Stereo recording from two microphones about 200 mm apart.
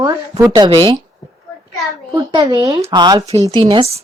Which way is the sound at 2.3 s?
20° right (ahead or behind).